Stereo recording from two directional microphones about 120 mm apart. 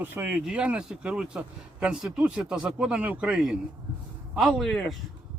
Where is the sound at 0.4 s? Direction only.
10° right (ahead or behind).